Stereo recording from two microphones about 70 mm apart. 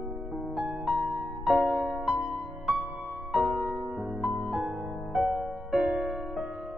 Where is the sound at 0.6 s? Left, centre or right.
Centre.